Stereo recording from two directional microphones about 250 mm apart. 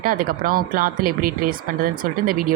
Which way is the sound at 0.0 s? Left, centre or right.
Right.